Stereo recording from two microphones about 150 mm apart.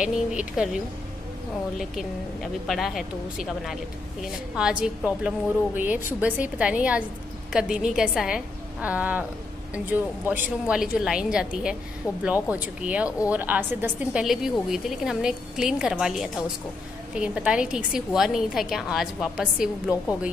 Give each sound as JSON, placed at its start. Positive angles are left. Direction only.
{"t": 0.0, "sound": "a woman's voice", "side_deg": -5}
{"t": 1.8, "sound": "a woman's voice", "side_deg": 0}
{"t": 4.2, "sound": "a woman's voice", "side_deg": -5}
{"t": 14.2, "sound": "a woman's voice", "side_deg": -5}
{"t": 19.9, "sound": "speech", "side_deg": 25}